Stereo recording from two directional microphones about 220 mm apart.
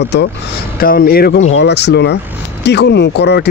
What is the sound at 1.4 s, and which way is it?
Speech, 60° left (ahead or behind).